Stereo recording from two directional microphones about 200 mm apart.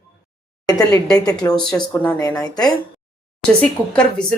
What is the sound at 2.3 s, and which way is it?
Speech, 20° left (ahead or behind).